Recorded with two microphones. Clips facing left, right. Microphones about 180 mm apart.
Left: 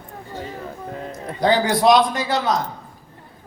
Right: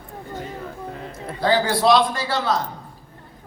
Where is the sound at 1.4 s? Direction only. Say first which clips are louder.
Left 2 dB; 20° left (ahead or behind).